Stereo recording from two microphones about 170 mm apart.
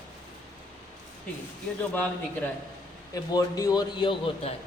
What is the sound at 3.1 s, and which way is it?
A man's voice, 20° left (ahead or behind).